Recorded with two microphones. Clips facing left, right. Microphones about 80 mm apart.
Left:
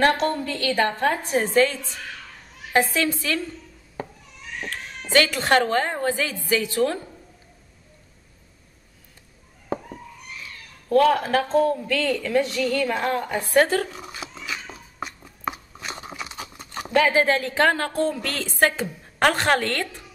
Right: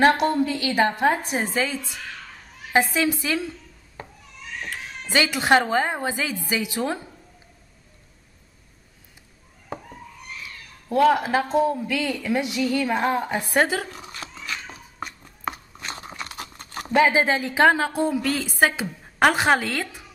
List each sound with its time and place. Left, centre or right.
0.0 s a woman's voice: centre
5.1 s a woman's voice: centre
10.9 s a sound: centre
16.9 s a woman's voice: centre